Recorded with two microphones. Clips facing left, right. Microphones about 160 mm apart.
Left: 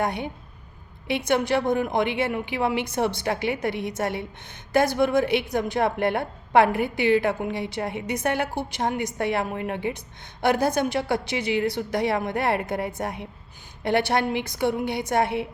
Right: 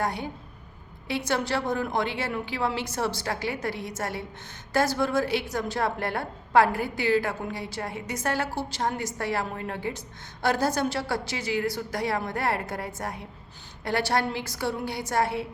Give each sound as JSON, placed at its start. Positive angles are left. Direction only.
{"t": 0.0, "sound": "a woman's voice", "side_deg": 20}
{"t": 1.3, "sound": "a woman's voice", "side_deg": 20}